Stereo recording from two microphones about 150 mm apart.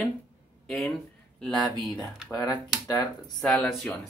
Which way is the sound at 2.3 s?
25° left (ahead or behind).